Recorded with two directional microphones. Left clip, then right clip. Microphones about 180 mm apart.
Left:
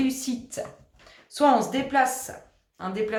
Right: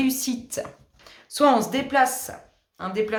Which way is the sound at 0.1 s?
45° right (ahead or behind).